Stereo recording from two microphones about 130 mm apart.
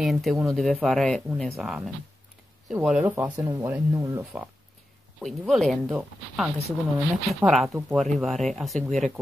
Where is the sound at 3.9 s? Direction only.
25° right (ahead or behind).